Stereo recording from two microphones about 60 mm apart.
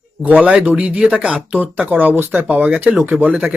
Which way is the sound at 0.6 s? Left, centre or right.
Right.